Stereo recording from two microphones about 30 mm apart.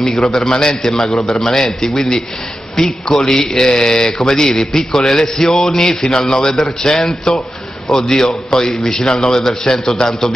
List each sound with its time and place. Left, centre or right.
0.0 s a man's voice: left